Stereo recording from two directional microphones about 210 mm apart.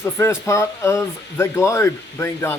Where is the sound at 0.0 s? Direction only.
10° left (ahead or behind).